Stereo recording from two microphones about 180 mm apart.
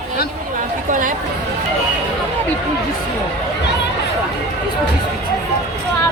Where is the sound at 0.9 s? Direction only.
45° right (ahead or behind).